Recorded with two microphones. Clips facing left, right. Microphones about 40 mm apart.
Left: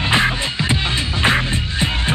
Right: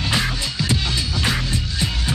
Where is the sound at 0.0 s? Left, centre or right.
Left.